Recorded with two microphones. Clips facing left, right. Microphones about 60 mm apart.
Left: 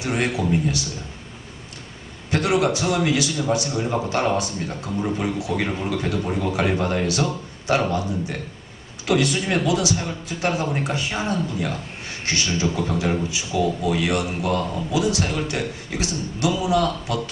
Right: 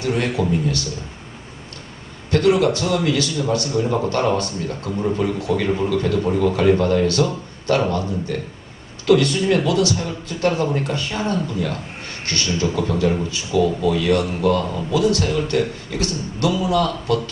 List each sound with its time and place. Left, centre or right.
0.0 s a man's voice: centre
2.3 s a man's voice: centre